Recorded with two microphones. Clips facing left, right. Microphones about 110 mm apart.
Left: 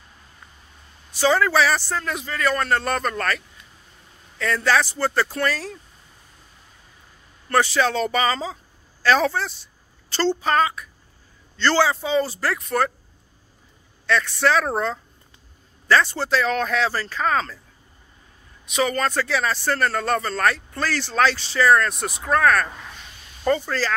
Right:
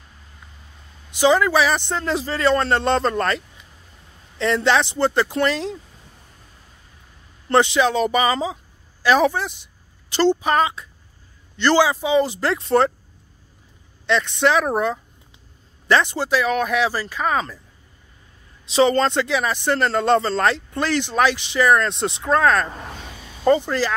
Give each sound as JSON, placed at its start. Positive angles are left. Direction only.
{"t": 1.1, "sound": "speech", "side_deg": -15}
{"t": 7.4, "sound": "speech", "side_deg": -20}
{"t": 14.0, "sound": "speech", "side_deg": -20}
{"t": 18.7, "sound": "speech", "side_deg": -30}
{"t": 22.8, "sound": "a sound", "side_deg": -50}
{"t": 23.4, "sound": "speech", "side_deg": -20}